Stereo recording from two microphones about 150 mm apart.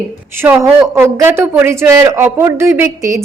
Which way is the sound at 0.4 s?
5° right (ahead or behind).